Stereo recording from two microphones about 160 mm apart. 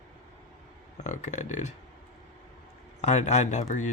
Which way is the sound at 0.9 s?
50° left (ahead or behind).